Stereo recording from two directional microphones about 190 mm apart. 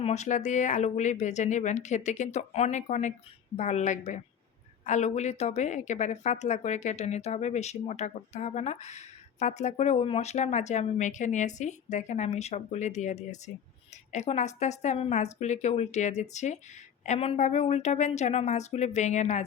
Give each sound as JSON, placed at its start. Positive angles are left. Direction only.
{"t": 0.0, "sound": "speech", "side_deg": 35}